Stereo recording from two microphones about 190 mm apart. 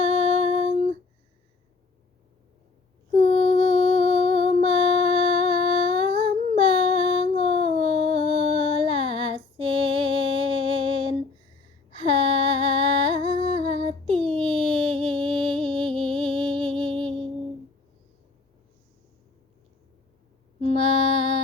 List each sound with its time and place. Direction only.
0.0 s female singing: 30° right (ahead or behind)
3.2 s mantra: 35° left (ahead or behind)
4.0 s music: 30° right (ahead or behind)
4.4 s a sound: 30° right (ahead or behind)
15.7 s music: 25° right (ahead or behind)